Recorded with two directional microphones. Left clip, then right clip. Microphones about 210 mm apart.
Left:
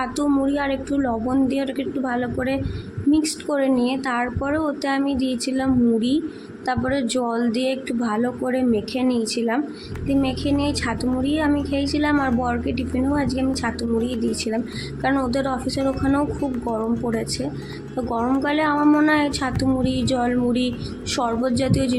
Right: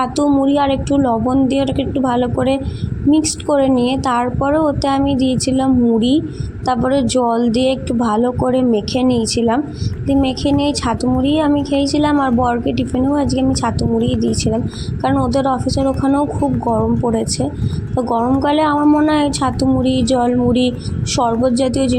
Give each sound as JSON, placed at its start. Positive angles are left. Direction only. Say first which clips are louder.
{"t": 0.0, "sound": "a woman's voice", "louder": "right 7 dB", "side_deg": -15}
{"t": 15.3, "sound": "a woman's voice", "louder": "right 7 dB", "side_deg": -15}
{"t": 16.0, "sound": "speech", "louder": "right 6 dB", "side_deg": 0}
{"t": 18.2, "sound": "speech", "louder": "right 3 dB", "side_deg": 0}
{"t": 18.4, "sound": "a woman's voice", "louder": "right 6 dB", "side_deg": -15}
{"t": 18.8, "sound": "speech", "louder": "right 4 dB", "side_deg": 0}
{"t": 19.0, "sound": "a woman's voice", "louder": "right 5 dB", "side_deg": -15}